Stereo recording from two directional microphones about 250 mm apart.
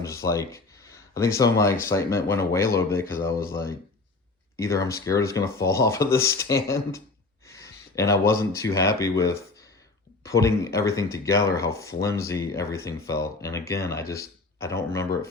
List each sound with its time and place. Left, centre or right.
0.0 s speech: centre